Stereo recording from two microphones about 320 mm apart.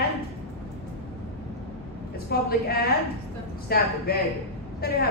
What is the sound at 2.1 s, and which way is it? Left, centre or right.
A woman's voice, left.